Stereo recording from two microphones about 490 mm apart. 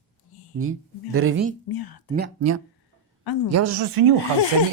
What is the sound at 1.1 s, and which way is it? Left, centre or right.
Speech, right.